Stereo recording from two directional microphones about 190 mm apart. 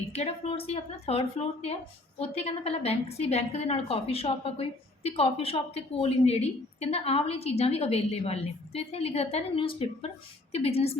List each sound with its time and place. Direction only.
0.1 s a woman's voice: 30° left (ahead or behind)